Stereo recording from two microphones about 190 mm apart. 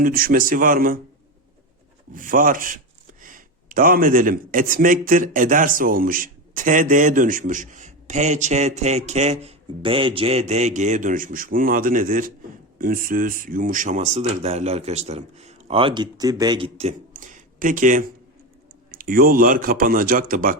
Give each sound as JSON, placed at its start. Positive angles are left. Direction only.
{"t": 0.0, "sound": "speech", "side_deg": -50}
{"t": 2.1, "sound": "speech", "side_deg": -45}